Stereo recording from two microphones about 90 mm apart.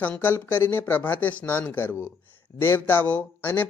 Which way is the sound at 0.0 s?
20° left (ahead or behind).